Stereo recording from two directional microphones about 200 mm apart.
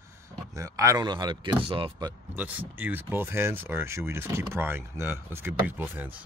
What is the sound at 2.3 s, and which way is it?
Speech, 10° right (ahead or behind).